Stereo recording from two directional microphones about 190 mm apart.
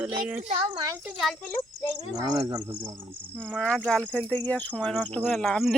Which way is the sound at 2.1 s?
20° right (ahead or behind).